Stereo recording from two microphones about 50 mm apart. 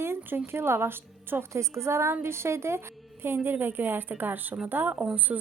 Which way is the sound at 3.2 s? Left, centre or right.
Right.